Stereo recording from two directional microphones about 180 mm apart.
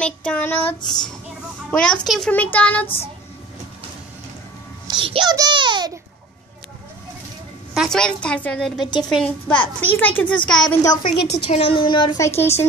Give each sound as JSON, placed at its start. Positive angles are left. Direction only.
{"t": 0.0, "sound": "a child's voice", "side_deg": 5}
{"t": 4.8, "sound": "a child's voice", "side_deg": -25}
{"t": 7.7, "sound": "a woman's voice", "side_deg": 0}
{"t": 10.8, "sound": "a child's voice", "side_deg": 25}
{"t": 11.1, "sound": "a woman's voice", "side_deg": 70}
{"t": 11.5, "sound": "a child's voice", "side_deg": 30}
{"t": 12.4, "sound": "a child's voice", "side_deg": 15}